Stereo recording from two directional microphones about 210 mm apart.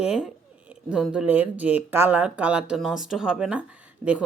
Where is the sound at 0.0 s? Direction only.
5° right (ahead or behind).